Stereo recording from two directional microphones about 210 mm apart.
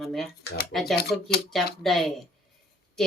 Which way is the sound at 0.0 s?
Centre (ahead or behind).